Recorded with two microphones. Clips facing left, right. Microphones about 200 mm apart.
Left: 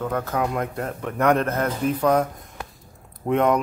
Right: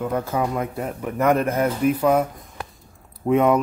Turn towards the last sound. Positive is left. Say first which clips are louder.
# right 2 dB
turn(degrees=-5)  # may be behind; listen again after turning